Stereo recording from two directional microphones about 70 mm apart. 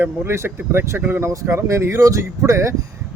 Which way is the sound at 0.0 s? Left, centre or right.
Right.